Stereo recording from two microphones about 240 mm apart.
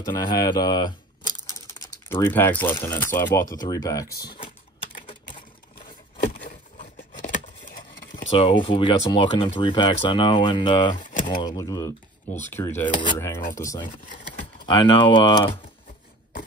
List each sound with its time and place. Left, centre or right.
0.0 s speech: centre
1.5 s typing: centre
2.0 s speech: centre
3.5 s typing: centre
6.8 s a sound: left
8.4 s speech: left
11.0 s a sound: left
11.2 s speech: centre